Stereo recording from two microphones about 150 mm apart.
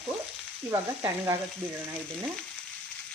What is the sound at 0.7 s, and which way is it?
Frying, 20° right (ahead or behind).